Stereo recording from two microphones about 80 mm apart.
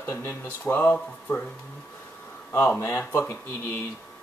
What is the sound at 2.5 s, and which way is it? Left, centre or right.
Speech, left.